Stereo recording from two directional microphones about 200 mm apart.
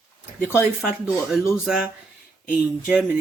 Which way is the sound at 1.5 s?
Centre (ahead or behind).